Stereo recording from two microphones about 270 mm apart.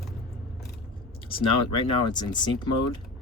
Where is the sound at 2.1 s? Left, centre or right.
Centre.